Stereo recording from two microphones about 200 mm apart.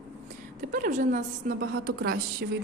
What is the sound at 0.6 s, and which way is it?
A woman's voice, 40° right (ahead or behind).